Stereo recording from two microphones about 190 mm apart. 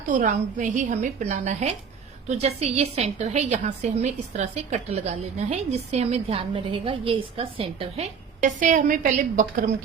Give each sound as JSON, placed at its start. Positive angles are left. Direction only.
{"t": 0.1, "sound": "a woman's voice", "side_deg": -45}